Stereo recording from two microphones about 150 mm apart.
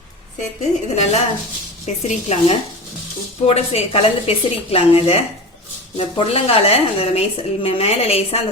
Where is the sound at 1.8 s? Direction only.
50° left (ahead or behind).